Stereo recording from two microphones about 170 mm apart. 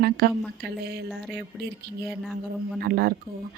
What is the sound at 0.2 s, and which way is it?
Speech, 65° right (ahead or behind).